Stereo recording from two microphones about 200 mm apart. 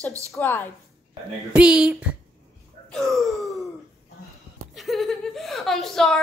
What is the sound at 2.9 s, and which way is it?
Speech, centre (ahead or behind).